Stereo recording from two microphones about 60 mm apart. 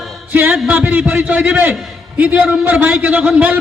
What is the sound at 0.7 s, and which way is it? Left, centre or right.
A man's voice, right.